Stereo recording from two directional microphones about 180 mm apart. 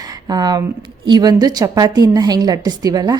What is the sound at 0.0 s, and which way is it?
A woman's voice, 20° right (ahead or behind).